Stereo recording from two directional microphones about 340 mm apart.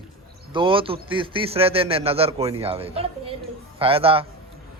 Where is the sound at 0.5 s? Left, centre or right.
Centre.